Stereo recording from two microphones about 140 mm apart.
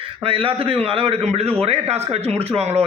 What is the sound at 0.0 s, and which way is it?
A man's voice, 40° right (ahead or behind).